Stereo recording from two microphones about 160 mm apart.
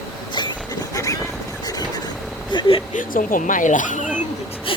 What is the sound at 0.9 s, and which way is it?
Vehicle, 20° left (ahead or behind).